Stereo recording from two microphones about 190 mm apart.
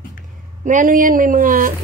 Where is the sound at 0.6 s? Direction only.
45° right (ahead or behind).